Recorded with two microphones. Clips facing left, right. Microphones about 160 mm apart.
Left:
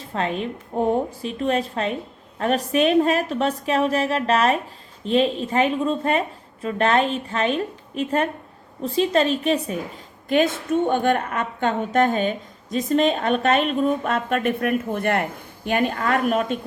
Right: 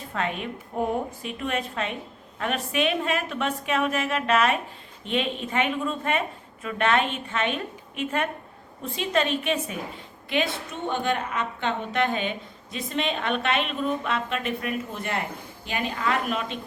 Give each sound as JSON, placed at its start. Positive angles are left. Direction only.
{"t": 0.1, "sound": "a woman's voice", "side_deg": 30}